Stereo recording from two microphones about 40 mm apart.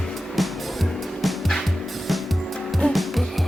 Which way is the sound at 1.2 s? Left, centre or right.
Centre.